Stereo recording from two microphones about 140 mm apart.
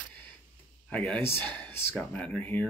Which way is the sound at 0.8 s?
10° left (ahead or behind).